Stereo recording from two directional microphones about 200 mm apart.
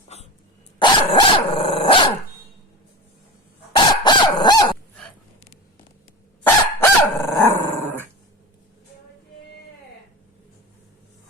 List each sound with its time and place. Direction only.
0.1 s dog: 30° left (ahead or behind)
3.7 s chicken: 25° left (ahead or behind)
6.4 s dog: 10° left (ahead or behind)